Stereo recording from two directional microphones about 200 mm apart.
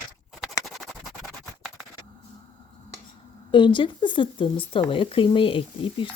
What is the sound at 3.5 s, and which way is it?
Speech, 25° left (ahead or behind).